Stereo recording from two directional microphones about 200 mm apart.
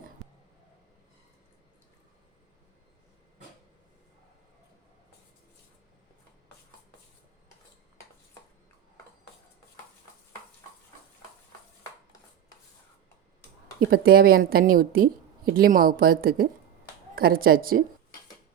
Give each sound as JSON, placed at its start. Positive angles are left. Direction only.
{"t": 13.8, "sound": "a woman's voice", "side_deg": -50}